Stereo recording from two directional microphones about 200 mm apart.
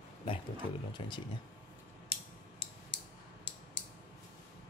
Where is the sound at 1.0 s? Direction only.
25° left (ahead or behind).